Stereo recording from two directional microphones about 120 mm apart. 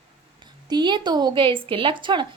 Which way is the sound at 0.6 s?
40° right (ahead or behind).